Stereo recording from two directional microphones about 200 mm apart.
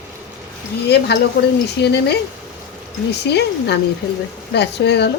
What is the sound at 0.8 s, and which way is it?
Speech, 55° left (ahead or behind).